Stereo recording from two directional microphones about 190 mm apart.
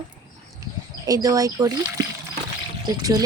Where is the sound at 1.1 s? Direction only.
20° right (ahead or behind).